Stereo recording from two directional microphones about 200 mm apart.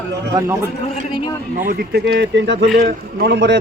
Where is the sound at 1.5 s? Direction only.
45° right (ahead or behind).